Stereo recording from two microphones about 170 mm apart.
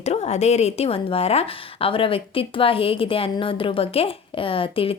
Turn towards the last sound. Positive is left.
turn(degrees=30)  # may be behind; listen again after turning